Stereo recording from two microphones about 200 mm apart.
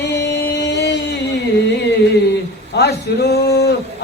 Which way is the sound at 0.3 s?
55° left (ahead or behind).